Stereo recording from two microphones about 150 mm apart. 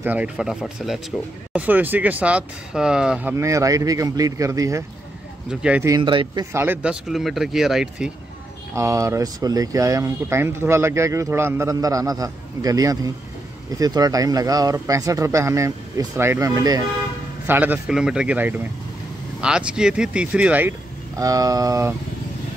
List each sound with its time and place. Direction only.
0.0 s speech: 10° right (ahead or behind)
5.5 s speech: 5° right (ahead or behind)
5.9 s speech: 30° right (ahead or behind)
6.5 s speech: 15° right (ahead or behind)
8.7 s speech: 20° right (ahead or behind)
17.5 s speech: 10° right (ahead or behind)
21.2 s speech: 25° right (ahead or behind)